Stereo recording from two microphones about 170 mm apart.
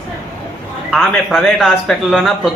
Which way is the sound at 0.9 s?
Centre (ahead or behind).